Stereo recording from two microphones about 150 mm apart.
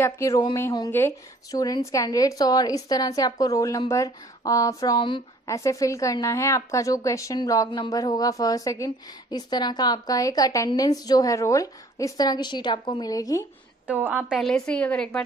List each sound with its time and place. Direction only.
0.0 s a woman's voice: 20° left (ahead or behind)
13.8 s a woman's voice: 10° right (ahead or behind)
14.4 s a woman's voice: 5° left (ahead or behind)